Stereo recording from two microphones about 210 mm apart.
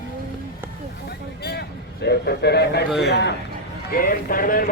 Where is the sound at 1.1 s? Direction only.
50° left (ahead or behind).